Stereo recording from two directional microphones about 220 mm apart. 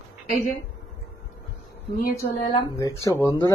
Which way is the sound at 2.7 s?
15° left (ahead or behind).